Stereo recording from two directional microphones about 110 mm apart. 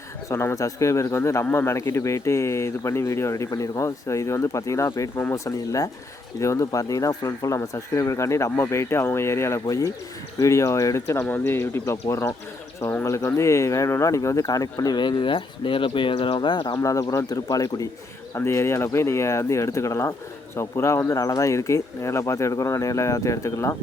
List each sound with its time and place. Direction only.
0.3 s speech: 25° left (ahead or behind); by 16.7 s 45° left (ahead or behind)
16.7 s speech: 30° left (ahead or behind)
18.3 s speech: 25° left (ahead or behind)